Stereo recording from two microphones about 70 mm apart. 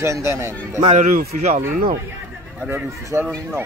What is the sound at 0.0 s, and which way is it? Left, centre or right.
Speech, right.